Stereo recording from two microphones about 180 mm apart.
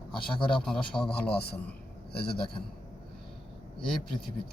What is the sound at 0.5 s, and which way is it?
Speech, centre (ahead or behind).